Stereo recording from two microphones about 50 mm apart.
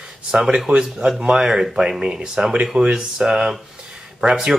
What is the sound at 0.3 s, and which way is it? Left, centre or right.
Speech, centre.